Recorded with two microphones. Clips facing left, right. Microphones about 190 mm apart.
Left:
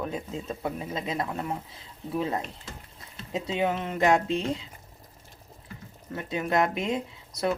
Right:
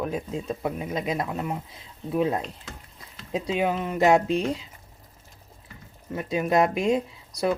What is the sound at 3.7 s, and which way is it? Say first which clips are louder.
Speech: right 3 dB; 15° right (ahead or behind).